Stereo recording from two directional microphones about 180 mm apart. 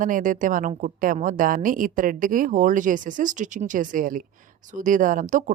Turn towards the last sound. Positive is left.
turn(degrees=-45)  # may be behind; listen again after turning